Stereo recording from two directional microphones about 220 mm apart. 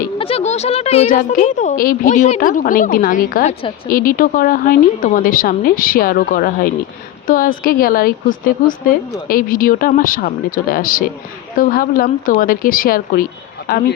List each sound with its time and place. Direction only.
0.2 s speech: 25° left (ahead or behind); by 13.8 s 50° left (ahead or behind)